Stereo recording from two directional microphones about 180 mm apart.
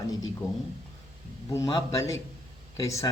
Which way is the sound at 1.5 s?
20° left (ahead or behind).